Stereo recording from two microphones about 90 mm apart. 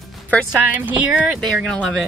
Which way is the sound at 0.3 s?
15° left (ahead or behind).